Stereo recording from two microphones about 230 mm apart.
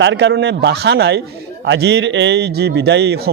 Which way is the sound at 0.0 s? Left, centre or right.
Right.